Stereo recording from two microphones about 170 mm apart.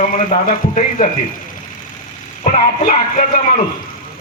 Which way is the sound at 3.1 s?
50° left (ahead or behind).